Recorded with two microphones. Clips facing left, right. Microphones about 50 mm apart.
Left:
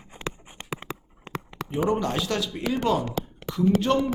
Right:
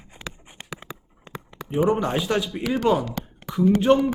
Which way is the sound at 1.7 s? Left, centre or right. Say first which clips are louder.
Right 3 dB; centre.